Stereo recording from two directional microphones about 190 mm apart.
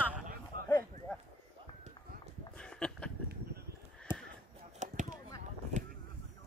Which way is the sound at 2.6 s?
5° left (ahead or behind).